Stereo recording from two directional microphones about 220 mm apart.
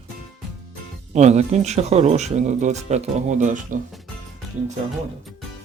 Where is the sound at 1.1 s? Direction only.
30° right (ahead or behind).